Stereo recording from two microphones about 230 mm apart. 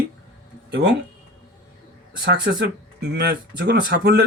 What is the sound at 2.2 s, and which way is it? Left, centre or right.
Speech, right.